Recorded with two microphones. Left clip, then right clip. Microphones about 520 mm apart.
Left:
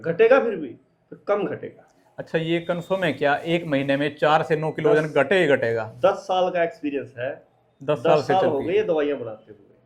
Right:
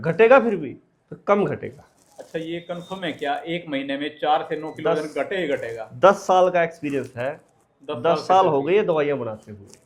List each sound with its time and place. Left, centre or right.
0.0 s speech: right
2.1 s speech: left
6.0 s speech: right